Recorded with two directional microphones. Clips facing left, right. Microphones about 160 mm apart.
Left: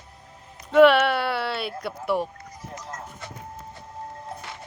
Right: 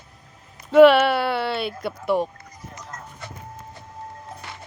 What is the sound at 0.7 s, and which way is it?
A woman's voice, centre (ahead or behind).